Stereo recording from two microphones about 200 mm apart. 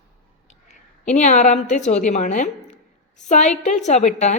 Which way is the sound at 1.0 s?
35° left (ahead or behind).